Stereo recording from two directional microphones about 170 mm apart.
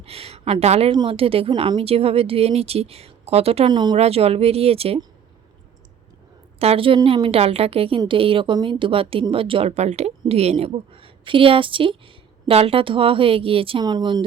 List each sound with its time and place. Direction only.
0.0 s a sound: 35° right (ahead or behind)
0.9 s speech: 30° right (ahead or behind)
3.9 s speech: 35° right (ahead or behind)
6.6 s speech: 35° right (ahead or behind)